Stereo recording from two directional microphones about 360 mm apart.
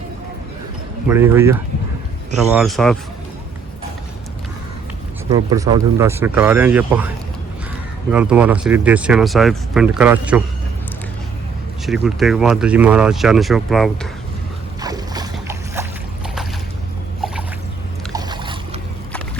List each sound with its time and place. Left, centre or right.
1.0 s speech: centre
5.3 s speech: centre
8.1 s speech: centre
11.9 s speech: centre
14.8 s boat: centre
18.1 s boat: centre